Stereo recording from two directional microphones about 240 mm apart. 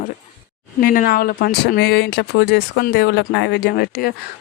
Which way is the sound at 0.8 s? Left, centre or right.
Left.